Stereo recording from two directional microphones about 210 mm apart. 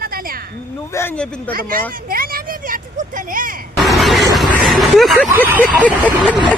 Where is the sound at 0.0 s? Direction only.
45° right (ahead or behind).